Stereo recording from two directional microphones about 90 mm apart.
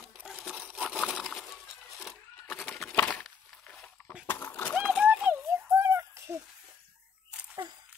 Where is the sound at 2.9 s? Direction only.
20° left (ahead or behind).